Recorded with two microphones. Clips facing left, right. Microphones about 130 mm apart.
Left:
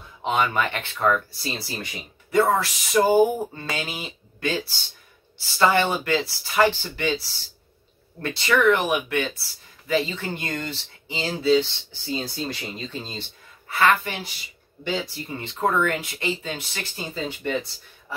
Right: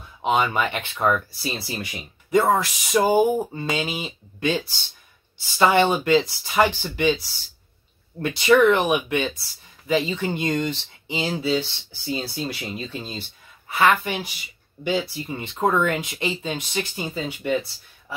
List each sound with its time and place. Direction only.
0.2 s speech: 15° right (ahead or behind)